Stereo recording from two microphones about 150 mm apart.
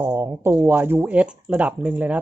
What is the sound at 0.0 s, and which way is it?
Speech, 15° right (ahead or behind).